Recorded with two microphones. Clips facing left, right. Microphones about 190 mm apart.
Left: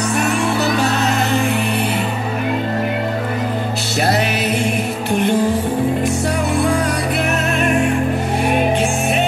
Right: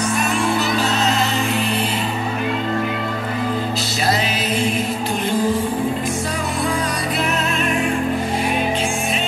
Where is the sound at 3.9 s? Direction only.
60° left (ahead or behind).